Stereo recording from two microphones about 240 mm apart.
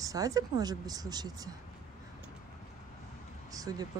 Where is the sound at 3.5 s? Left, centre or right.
Centre.